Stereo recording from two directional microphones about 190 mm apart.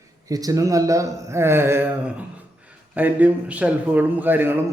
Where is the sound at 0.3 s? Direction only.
20° right (ahead or behind).